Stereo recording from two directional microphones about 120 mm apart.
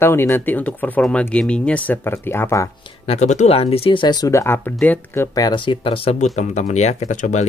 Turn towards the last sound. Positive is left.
turn(degrees=85)